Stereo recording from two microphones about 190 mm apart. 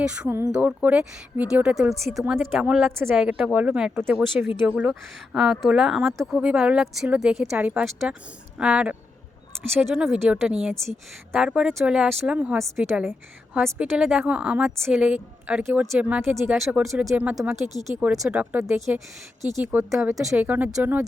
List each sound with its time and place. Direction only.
0.0 s a woman's voice: 5° right (ahead or behind)